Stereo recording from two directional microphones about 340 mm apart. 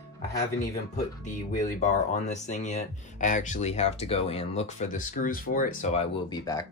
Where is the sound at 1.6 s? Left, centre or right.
Left.